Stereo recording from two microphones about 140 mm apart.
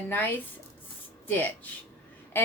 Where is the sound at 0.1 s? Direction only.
15° left (ahead or behind).